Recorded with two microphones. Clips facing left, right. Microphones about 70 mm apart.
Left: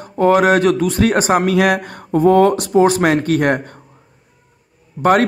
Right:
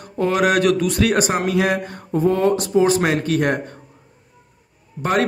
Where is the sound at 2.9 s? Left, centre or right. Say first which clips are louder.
Left 3 dB; left.